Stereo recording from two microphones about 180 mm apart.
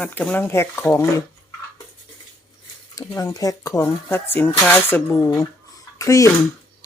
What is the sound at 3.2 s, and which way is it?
Speech, 20° left (ahead or behind).